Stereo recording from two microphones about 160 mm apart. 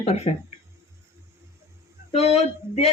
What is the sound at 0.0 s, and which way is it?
Speech, 40° left (ahead or behind).